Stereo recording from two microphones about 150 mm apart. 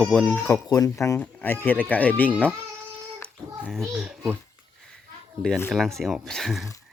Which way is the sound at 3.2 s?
5° left (ahead or behind).